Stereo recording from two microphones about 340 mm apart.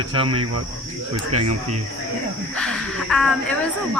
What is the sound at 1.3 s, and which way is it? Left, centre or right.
Speech, right.